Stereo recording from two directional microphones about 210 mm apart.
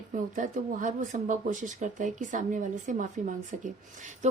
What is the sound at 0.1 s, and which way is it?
A woman's voice, 40° right (ahead or behind).